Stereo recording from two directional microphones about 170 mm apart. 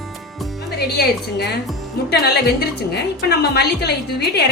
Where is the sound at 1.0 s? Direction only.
70° left (ahead or behind).